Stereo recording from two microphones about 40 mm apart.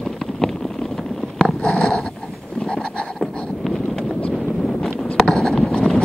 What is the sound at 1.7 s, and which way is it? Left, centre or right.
Dog, centre.